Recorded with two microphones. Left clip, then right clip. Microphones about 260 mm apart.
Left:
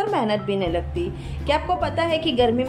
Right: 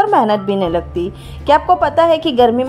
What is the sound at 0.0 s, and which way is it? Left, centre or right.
Speech, right.